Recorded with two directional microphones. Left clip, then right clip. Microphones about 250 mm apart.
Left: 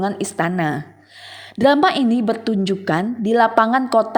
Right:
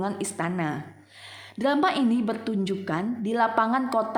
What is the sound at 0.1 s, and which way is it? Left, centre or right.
A woman's voice, left.